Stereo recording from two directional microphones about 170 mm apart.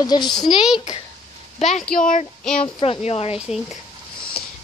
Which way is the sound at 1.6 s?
45° left (ahead or behind).